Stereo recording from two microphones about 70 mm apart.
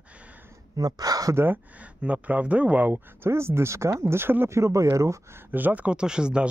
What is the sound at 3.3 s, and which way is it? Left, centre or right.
Speech, right.